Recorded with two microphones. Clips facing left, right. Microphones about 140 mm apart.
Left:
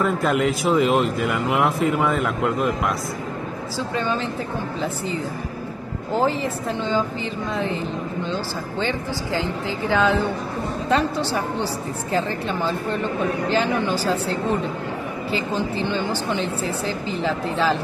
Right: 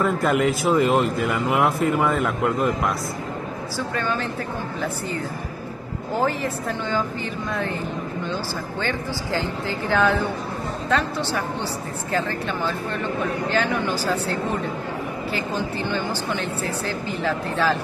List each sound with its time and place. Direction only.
0.0 s speech: centre (ahead or behind)
9.7 s speech: 15° left (ahead or behind)
10.9 s speech: 35° left (ahead or behind)
15.3 s speech: 25° left (ahead or behind)